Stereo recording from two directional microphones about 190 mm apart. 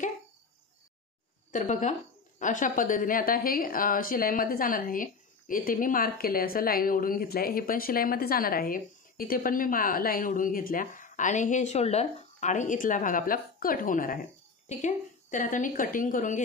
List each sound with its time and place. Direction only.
1.5 s a woman's voice: 40° left (ahead or behind)